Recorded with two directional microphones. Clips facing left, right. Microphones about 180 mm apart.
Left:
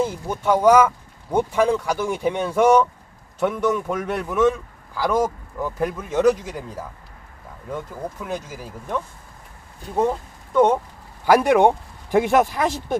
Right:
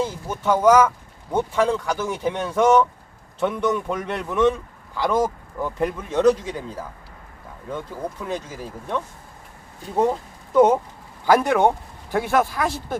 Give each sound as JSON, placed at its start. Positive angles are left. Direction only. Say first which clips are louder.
{"t": 0.0, "sound": "speech", "louder": "left 2 dB", "side_deg": 15}
{"t": 8.2, "sound": "speech", "louder": "right 1 dB", "side_deg": 10}
{"t": 9.9, "sound": "speech", "louder": "right 1 dB", "side_deg": -5}
{"t": 11.3, "sound": "speech", "louder": "left 2 dB", "side_deg": 15}